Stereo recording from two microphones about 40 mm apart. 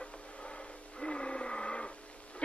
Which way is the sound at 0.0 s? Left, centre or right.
Left.